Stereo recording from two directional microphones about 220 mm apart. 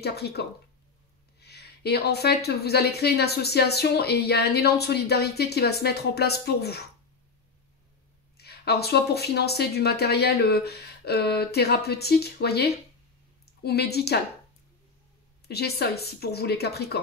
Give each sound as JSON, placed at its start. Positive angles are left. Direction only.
{"t": 0.0, "sound": "speech", "side_deg": 45}
{"t": 8.4, "sound": "speech", "side_deg": 45}
{"t": 15.4, "sound": "speech", "side_deg": 45}